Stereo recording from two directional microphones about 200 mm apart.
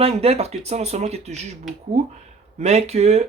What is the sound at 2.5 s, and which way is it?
Speech, 30° right (ahead or behind).